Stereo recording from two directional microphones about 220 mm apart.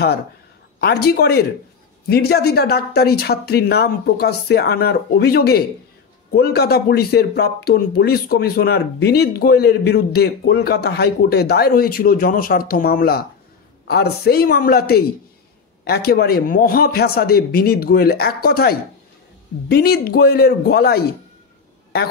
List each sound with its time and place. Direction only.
0.7 s speech: 45° left (ahead or behind)